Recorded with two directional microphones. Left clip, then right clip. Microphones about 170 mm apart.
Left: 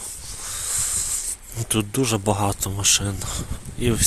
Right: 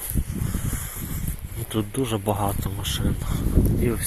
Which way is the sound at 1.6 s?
45° left (ahead or behind).